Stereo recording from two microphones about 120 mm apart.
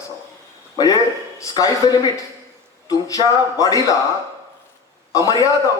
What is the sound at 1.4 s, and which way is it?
Speech, 30° left (ahead or behind).